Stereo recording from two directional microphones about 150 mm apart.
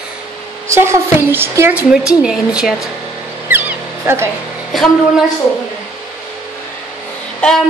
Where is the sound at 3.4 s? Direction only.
15° right (ahead or behind).